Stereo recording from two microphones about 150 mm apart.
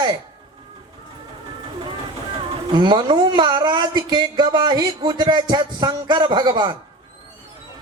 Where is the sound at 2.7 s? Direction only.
30° right (ahead or behind).